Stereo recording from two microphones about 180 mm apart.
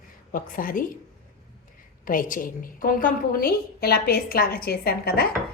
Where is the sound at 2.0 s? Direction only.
50° left (ahead or behind).